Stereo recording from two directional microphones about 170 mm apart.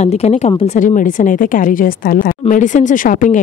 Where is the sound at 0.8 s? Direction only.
50° left (ahead or behind).